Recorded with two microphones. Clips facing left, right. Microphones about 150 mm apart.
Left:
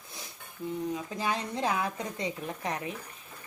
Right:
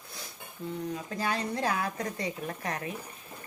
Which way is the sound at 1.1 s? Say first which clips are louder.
Right 1 dB; 15° left (ahead or behind).